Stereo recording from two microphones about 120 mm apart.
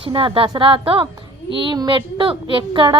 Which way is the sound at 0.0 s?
45° right (ahead or behind).